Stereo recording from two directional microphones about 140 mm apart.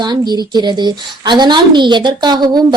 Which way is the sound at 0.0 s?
30° right (ahead or behind).